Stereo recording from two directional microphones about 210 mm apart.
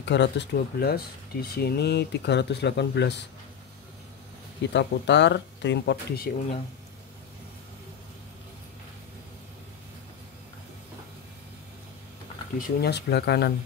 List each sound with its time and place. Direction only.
0.0 s speech: 55° left (ahead or behind)
4.7 s speech: 55° left (ahead or behind)
12.5 s speech: 45° left (ahead or behind)